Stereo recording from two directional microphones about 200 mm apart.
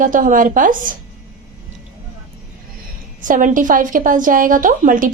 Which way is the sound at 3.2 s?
40° right (ahead or behind).